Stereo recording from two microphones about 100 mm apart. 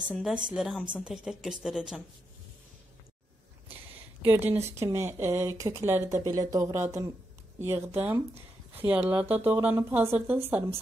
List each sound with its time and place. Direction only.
0.2 s speech: 5° right (ahead or behind)
4.2 s speech: 20° right (ahead or behind)